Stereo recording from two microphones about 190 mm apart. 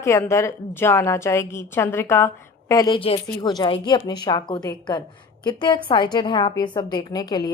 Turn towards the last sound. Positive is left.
turn(degrees=20)  # may be behind; listen again after turning